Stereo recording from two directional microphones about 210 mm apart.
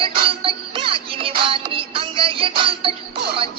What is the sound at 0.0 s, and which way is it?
Music, 25° right (ahead or behind).